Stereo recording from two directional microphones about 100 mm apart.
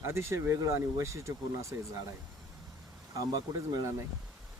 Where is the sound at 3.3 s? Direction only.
45° right (ahead or behind).